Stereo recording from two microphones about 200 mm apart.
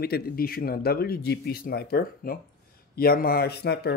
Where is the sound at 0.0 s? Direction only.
50° left (ahead or behind).